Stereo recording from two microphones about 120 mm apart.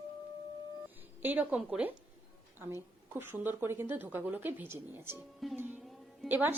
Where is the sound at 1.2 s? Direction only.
15° right (ahead or behind).